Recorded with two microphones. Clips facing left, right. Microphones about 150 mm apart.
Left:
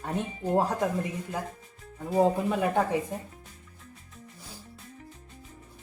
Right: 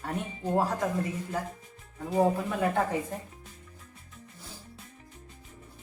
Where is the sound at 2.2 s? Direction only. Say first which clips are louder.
Left 2 dB; 20° left (ahead or behind).